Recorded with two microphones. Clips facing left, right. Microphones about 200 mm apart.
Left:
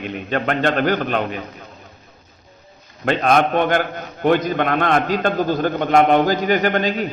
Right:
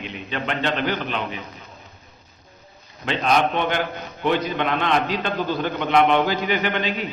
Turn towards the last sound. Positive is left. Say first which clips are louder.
# left 5 dB
turn(degrees=45)  # may be behind; listen again after turning